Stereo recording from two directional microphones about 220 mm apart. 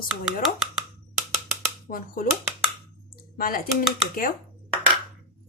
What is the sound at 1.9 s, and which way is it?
Speech, 40° left (ahead or behind).